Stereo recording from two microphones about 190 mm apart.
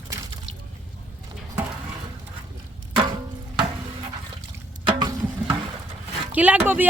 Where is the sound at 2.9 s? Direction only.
25° right (ahead or behind).